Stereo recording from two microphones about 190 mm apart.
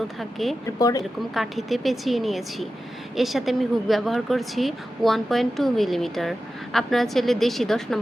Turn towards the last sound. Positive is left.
turn(degrees=0)  # may be behind; listen again after turning